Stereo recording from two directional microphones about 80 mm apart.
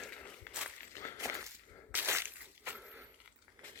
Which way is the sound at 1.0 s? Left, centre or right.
Left.